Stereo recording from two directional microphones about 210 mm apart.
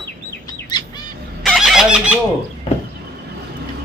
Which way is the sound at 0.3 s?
20° left (ahead or behind).